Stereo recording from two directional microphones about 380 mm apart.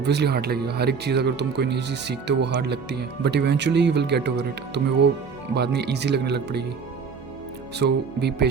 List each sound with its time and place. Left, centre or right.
0.0 s speech: right
7.8 s speech: right